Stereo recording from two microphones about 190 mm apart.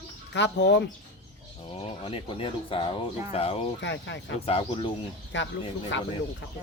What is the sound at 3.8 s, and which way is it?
Speech, 70° left (ahead or behind).